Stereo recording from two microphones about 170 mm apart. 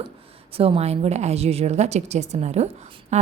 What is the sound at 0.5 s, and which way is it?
A woman's voice, 35° right (ahead or behind).